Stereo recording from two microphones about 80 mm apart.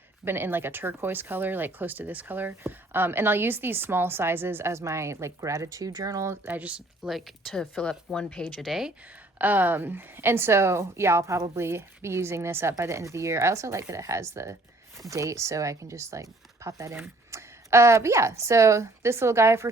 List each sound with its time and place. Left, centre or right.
0.3 s speech: right
6.4 s speech: centre
7.0 s speech: centre
8.6 s speech: centre
9.4 s a woman's voice: right